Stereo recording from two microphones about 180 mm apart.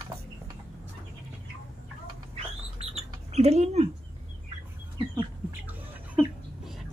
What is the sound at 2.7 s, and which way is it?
Rodents, 35° right (ahead or behind).